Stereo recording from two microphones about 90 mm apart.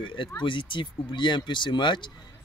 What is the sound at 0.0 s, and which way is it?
Speech, 70° left (ahead or behind).